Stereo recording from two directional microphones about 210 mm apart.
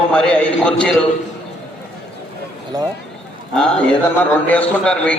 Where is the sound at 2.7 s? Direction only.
15° right (ahead or behind).